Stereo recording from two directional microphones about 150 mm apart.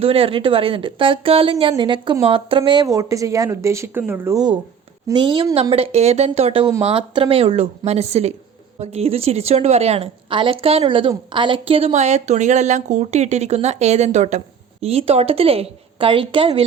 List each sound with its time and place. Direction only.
0.0 s speech: 40° right (ahead or behind); by 4.4 s 15° right (ahead or behind)
5.0 s speech: 30° right (ahead or behind)
5.7 s speech: 45° right (ahead or behind)